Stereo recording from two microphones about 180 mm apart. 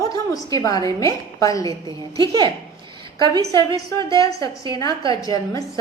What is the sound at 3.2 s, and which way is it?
Speech, 25° right (ahead or behind).